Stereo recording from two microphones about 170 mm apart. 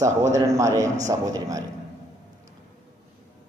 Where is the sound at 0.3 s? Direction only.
20° right (ahead or behind).